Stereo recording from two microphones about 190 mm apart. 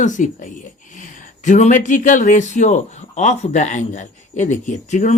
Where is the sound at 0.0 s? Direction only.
40° left (ahead or behind).